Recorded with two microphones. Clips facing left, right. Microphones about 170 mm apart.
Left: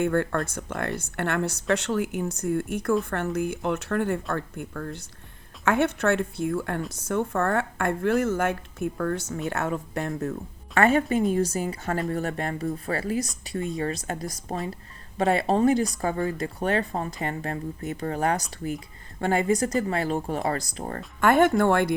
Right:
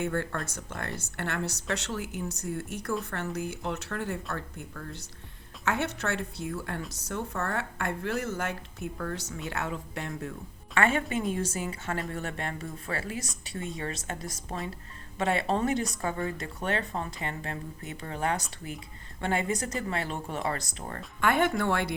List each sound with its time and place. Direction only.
0.0 s a woman's voice: 55° left (ahead or behind); by 21.0 s 35° left (ahead or behind)
21.2 s speech: 45° left (ahead or behind)